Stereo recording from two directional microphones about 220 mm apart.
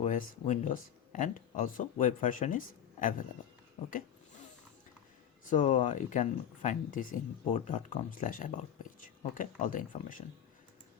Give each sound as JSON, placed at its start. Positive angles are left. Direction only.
{"t": 0.0, "sound": "speech", "side_deg": 35}
{"t": 5.5, "sound": "speech", "side_deg": 35}